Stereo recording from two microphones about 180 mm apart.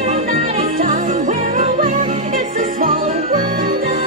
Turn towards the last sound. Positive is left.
turn(degrees=-50)  # may be behind; listen again after turning